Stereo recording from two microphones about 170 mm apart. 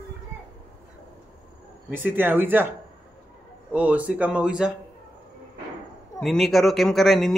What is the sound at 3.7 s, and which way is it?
Speech, 10° right (ahead or behind).